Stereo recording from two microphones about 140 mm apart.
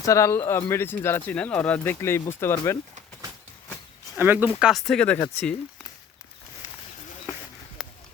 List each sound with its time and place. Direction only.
0.0 s speech: 20° left (ahead or behind)
4.2 s speech: 15° right (ahead or behind)
4.7 s speech: 5° left (ahead or behind)